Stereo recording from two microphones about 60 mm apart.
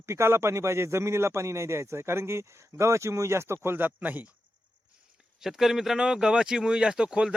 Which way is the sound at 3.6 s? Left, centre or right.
Right.